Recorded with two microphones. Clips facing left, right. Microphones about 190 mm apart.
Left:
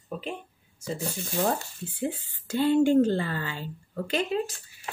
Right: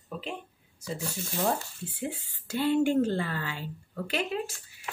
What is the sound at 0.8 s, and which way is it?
Speech, 25° left (ahead or behind).